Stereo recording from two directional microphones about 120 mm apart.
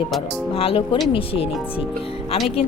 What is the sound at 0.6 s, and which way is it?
Speech, 50° left (ahead or behind).